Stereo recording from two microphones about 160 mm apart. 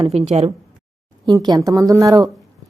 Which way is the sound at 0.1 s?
45° right (ahead or behind).